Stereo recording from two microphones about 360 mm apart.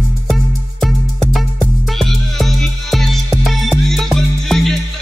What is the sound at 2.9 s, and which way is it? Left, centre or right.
Music, centre.